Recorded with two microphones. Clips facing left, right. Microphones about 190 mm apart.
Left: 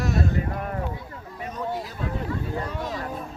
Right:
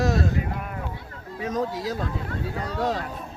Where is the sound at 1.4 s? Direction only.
90° right.